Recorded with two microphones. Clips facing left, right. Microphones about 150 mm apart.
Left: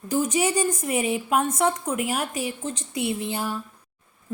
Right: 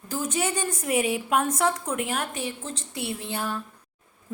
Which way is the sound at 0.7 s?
5° right (ahead or behind).